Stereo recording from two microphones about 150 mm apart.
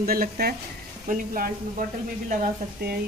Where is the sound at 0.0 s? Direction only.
80° right.